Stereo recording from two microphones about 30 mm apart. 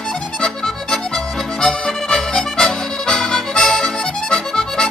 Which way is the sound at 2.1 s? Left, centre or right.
Centre.